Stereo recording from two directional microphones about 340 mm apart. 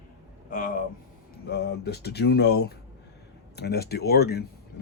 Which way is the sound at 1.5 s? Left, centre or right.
Left.